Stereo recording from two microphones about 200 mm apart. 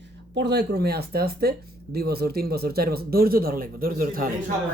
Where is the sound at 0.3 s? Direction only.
55° right (ahead or behind).